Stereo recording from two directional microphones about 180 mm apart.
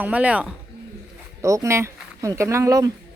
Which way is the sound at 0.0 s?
5° right (ahead or behind).